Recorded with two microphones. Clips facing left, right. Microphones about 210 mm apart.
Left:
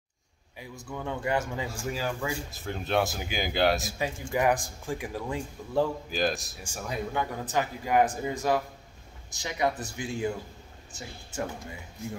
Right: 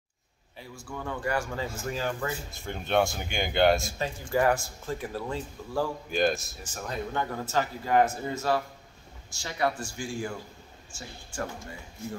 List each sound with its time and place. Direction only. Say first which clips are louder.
0.6 s a man's voice: left 1 dB; 15° left (ahead or behind)
1.8 s speech: even; 10° left (ahead or behind)
4.2 s a man's voice: right 1 dB; 15° left (ahead or behind)
6.0 s speech: right 3 dB; centre (ahead or behind)
6.6 s a man's voice: left 1 dB; 10° left (ahead or behind)